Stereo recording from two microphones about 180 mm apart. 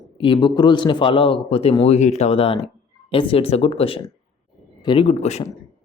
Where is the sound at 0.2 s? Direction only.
25° left (ahead or behind).